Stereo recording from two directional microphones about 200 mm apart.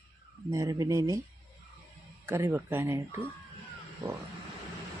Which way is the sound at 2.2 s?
10° right (ahead or behind).